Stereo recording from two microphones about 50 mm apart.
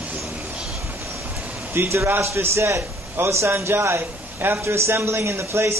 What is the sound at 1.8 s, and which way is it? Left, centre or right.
A man's voice, right.